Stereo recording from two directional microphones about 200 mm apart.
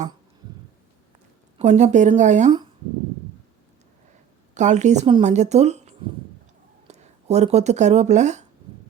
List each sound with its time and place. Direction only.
1.5 s speech: 35° right (ahead or behind)
4.5 s speech: 35° right (ahead or behind)